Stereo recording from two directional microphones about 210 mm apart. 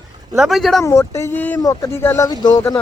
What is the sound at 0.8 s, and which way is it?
Speech, 15° left (ahead or behind).